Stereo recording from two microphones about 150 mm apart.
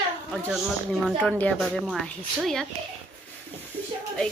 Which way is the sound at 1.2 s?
10° left (ahead or behind).